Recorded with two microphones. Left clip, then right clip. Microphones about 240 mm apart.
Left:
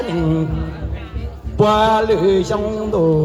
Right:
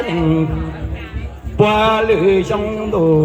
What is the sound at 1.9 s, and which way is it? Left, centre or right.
Speech, right.